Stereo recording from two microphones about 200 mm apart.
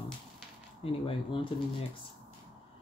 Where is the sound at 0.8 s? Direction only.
25° left (ahead or behind).